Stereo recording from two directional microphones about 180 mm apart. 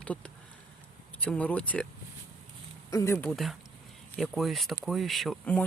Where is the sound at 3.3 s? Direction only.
Centre (ahead or behind).